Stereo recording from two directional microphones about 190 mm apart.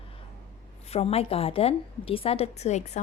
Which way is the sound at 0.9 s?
30° left (ahead or behind).